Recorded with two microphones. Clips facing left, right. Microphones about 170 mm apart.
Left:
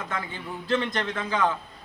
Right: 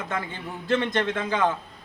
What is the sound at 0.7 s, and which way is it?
Speech, 20° right (ahead or behind).